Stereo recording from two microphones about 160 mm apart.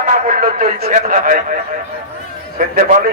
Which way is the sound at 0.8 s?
45° right (ahead or behind).